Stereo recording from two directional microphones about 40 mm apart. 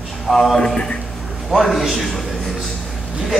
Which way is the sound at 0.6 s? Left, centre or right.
Centre.